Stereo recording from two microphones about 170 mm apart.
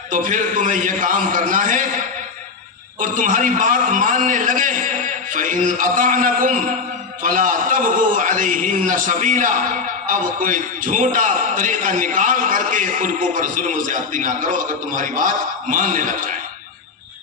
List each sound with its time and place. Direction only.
0.1 s a man's voice: 50° right (ahead or behind)
3.0 s a man's voice: 50° right (ahead or behind)